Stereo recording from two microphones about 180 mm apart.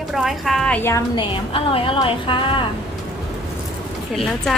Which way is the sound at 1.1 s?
25° left (ahead or behind).